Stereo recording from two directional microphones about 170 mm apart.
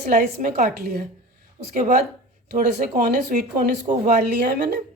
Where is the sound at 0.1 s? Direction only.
55° right (ahead or behind).